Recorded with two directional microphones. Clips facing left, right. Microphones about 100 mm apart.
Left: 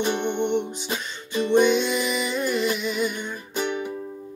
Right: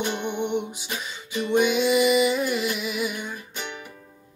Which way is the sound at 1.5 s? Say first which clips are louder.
Left 1 dB; 5° right (ahead or behind).